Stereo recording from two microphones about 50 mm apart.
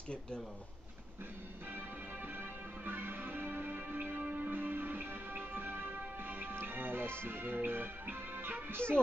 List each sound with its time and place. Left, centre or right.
1.7 s music: right
7.2 s speech: right